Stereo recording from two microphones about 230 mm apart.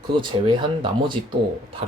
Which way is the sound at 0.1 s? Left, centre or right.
Right.